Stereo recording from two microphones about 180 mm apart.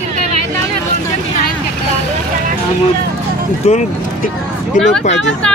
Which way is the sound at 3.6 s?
35° left (ahead or behind).